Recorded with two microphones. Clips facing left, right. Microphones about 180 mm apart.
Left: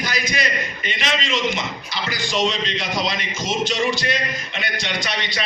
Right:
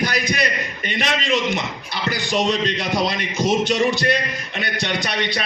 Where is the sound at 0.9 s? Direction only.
55° right (ahead or behind).